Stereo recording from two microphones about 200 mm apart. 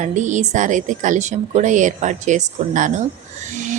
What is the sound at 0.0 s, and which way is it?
A woman's voice, 40° right (ahead or behind).